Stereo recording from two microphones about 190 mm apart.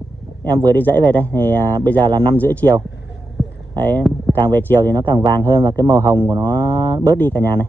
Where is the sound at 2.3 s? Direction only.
10° left (ahead or behind).